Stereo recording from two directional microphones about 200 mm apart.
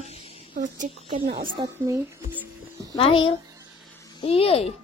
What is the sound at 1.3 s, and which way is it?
Speech, 25° right (ahead or behind).